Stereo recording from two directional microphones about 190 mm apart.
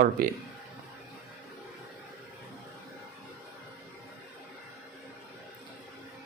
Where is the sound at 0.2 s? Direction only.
50° right (ahead or behind).